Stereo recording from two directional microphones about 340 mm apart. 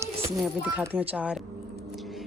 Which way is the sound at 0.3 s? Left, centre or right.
Centre.